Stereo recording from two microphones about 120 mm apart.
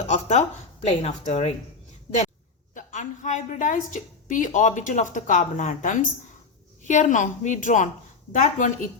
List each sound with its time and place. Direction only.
0.1 s a sound: 70° left (ahead or behind)
0.9 s speech: 65° left (ahead or behind)
2.7 s a woman's voice: 90° left